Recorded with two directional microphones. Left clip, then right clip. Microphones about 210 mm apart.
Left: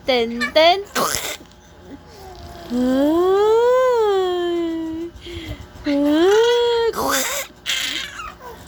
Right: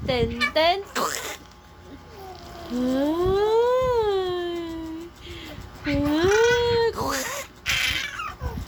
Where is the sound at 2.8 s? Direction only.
25° left (ahead or behind).